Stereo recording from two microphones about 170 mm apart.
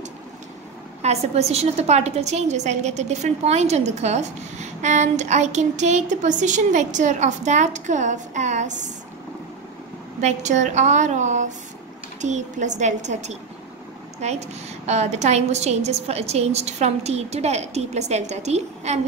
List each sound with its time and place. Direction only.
1.0 s a woman's voice: 40° right (ahead or behind)
10.2 s a woman's voice: 45° right (ahead or behind)